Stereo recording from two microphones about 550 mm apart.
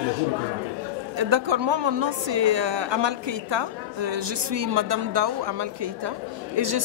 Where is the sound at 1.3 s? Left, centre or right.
Right.